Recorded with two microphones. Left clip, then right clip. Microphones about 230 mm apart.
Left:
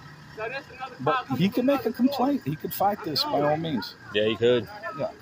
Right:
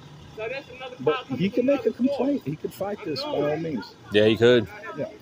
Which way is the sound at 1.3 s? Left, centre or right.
Left.